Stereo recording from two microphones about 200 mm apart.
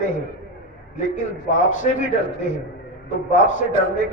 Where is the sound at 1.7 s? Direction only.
40° left (ahead or behind).